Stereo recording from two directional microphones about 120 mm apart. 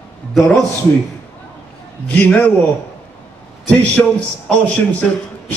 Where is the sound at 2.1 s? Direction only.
15° left (ahead or behind).